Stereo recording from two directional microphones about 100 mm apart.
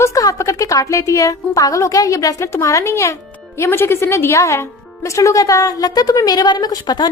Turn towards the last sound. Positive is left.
turn(degrees=45)  # may be behind; listen again after turning